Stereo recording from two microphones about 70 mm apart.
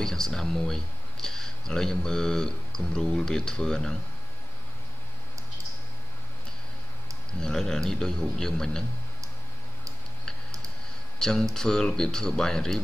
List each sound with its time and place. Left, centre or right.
0.0 s speech: centre
7.3 s speech: centre
11.1 s speech: centre